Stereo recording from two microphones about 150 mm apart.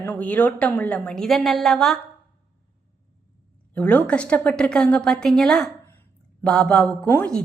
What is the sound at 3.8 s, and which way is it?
A woman's voice, 10° left (ahead or behind).